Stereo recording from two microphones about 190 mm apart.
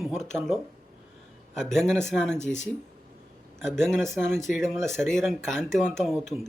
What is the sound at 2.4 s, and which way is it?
Speech, 40° left (ahead or behind).